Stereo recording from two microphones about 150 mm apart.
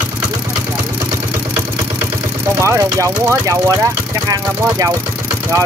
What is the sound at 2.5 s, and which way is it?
Speech, 20° right (ahead or behind).